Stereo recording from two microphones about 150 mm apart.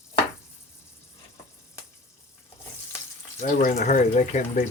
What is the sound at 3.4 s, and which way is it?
Speech, 60° left (ahead or behind).